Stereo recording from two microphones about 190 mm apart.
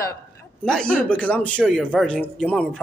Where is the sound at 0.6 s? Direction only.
5° left (ahead or behind).